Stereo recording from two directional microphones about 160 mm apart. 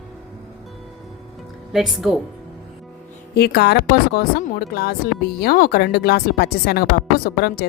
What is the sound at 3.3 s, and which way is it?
Speech, 85° left.